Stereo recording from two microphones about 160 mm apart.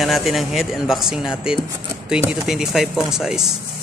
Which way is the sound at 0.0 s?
Centre (ahead or behind).